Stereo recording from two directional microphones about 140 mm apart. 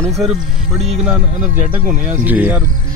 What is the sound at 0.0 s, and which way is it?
Speech, centre (ahead or behind).